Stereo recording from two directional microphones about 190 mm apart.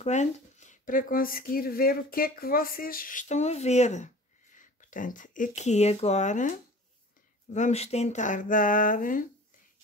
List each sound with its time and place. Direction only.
0.0 s speech: 40° left (ahead or behind)
7.5 s speech: 35° left (ahead or behind)